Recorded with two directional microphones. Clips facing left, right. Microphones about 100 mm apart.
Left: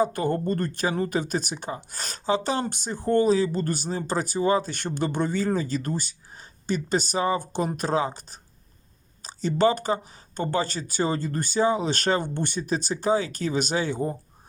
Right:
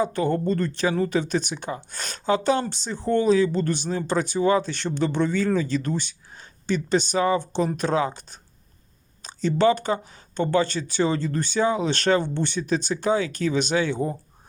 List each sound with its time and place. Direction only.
0.0 s speech: 45° left (ahead or behind)
2.6 s speech: 50° left (ahead or behind)